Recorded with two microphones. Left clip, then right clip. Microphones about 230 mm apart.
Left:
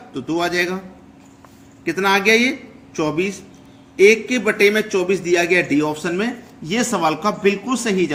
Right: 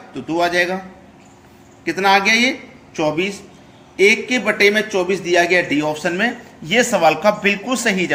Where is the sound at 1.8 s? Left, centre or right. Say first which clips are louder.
Right 2 dB; left.